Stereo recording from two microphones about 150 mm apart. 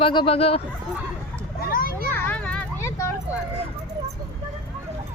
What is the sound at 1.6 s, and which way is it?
Children playing, 80° left.